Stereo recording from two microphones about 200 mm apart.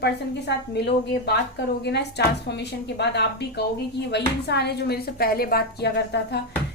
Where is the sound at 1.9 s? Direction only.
60° left (ahead or behind).